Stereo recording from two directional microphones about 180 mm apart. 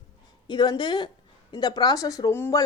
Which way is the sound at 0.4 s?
25° left (ahead or behind).